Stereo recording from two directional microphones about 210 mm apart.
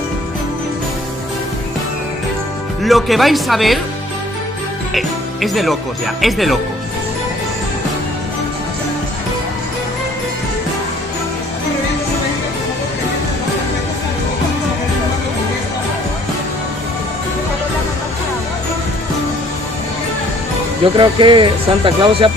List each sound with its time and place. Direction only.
2.8 s speech: centre (ahead or behind)
4.9 s speech: centre (ahead or behind)
20.8 s speech: 25° right (ahead or behind)